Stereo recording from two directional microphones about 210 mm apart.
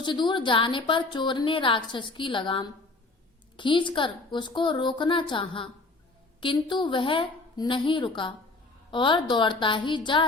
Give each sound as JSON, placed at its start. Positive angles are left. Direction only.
{"t": 0.0, "sound": "a woman's voice", "side_deg": 20}